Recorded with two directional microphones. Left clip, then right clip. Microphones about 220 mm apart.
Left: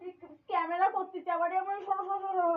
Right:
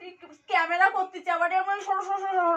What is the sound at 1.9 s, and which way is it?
Speech, 25° right (ahead or behind).